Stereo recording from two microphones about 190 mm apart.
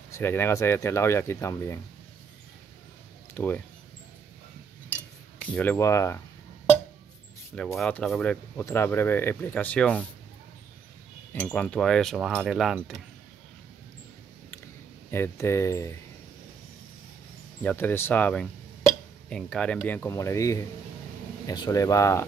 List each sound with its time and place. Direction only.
0.1 s speech: 10° left (ahead or behind)
3.3 s speech: 10° left (ahead or behind)
5.4 s speech: 10° left (ahead or behind)
7.5 s speech: centre (ahead or behind)
11.3 s speech: 10° left (ahead or behind)
15.0 s speech: 10° left (ahead or behind)
17.6 s speech: 10° left (ahead or behind)